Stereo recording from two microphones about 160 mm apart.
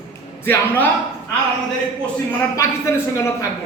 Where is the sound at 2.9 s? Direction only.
15° left (ahead or behind).